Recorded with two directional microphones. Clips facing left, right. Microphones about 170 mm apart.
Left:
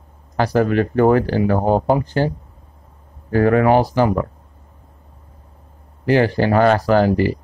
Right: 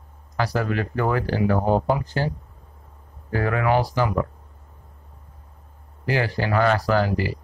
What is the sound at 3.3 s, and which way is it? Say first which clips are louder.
Speech: left 8 dB; 40° left (ahead or behind).